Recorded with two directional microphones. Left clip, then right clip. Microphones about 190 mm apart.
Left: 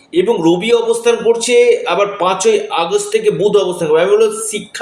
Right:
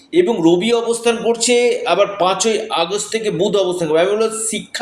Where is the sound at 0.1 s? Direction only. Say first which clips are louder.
Left 1 dB; 40° right (ahead or behind).